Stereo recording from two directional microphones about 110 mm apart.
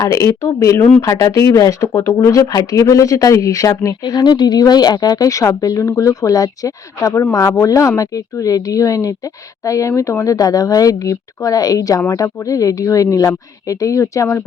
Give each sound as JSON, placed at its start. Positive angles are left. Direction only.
{"t": 0.0, "sound": "speech", "side_deg": 30}